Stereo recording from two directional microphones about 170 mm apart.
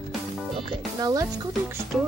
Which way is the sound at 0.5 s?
30° right (ahead or behind).